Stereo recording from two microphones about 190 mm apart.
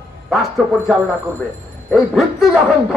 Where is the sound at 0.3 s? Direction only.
Centre (ahead or behind).